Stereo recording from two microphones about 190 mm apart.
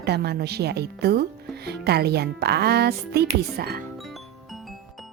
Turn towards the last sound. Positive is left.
turn(degrees=-55)  # may be behind; listen again after turning